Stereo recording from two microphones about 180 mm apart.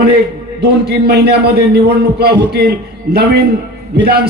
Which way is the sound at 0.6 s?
65° right (ahead or behind).